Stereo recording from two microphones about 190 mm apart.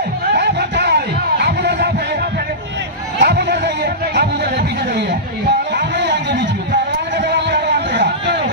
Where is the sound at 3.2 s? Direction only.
60° right (ahead or behind).